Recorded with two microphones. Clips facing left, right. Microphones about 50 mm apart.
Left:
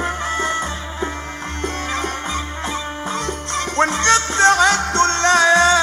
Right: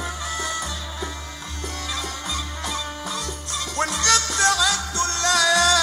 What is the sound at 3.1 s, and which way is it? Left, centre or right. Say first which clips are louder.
Music: left 7 dB; left.